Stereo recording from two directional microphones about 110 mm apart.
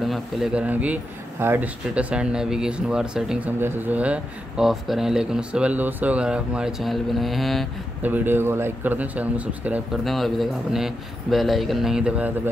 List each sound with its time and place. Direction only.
0.1 s speech: centre (ahead or behind)
0.7 s speech: 15° right (ahead or behind)
3.6 s speech: 15° right (ahead or behind); by 7.6 s centre (ahead or behind)
8.0 s speech: 15° right (ahead or behind)
10.0 s speech: centre (ahead or behind)